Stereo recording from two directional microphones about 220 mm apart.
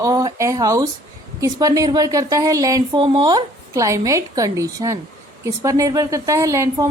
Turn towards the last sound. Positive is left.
turn(degrees=-15)  # may be behind; listen again after turning